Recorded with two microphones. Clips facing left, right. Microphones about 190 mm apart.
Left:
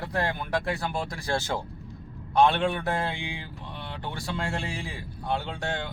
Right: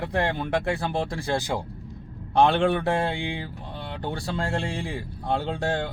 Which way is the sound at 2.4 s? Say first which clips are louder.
Right 2 dB; 30° right (ahead or behind).